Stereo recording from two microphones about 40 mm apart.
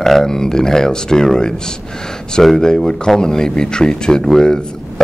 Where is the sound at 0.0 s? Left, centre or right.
Centre.